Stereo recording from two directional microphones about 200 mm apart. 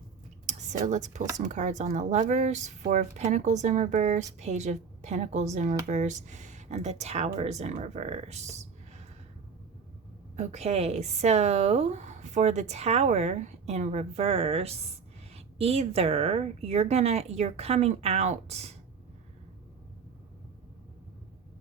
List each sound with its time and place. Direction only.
0.4 s a sound: 35° right (ahead or behind)
1.4 s speech: 35° right (ahead or behind)
10.3 s speech: 35° right (ahead or behind)